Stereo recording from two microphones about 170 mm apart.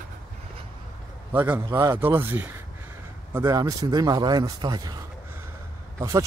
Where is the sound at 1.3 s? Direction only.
15° right (ahead or behind).